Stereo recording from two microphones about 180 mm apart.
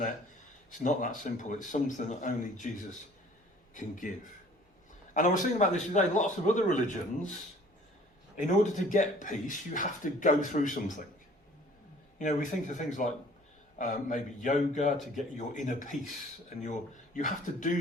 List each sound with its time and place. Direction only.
0.9 s speech: 45° left (ahead or behind)
5.1 s speech: 45° left (ahead or behind)
8.4 s speech: 45° left (ahead or behind)
12.2 s speech: 45° left (ahead or behind)
17.2 s speech: 45° left (ahead or behind)